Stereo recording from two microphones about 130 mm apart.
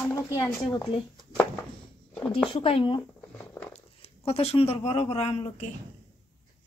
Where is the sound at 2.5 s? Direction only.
45° left (ahead or behind).